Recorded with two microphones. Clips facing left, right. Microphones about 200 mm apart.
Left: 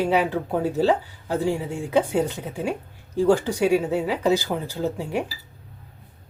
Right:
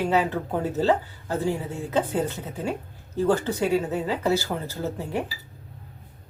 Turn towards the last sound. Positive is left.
turn(degrees=15)  # may be behind; listen again after turning